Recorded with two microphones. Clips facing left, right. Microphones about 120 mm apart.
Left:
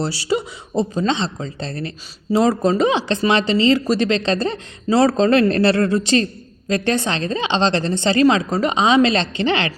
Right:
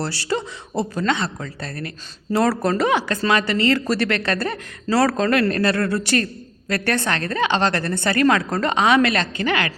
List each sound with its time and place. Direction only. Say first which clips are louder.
0.0 s speech: left 3 dB; 15° left (ahead or behind)